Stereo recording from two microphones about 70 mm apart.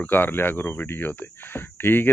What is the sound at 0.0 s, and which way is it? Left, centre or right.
Speech, left.